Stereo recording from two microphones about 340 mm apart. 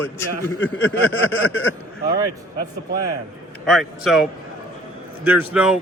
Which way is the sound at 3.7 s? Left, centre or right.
Centre.